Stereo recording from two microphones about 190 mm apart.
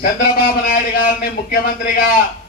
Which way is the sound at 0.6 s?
50° left (ahead or behind).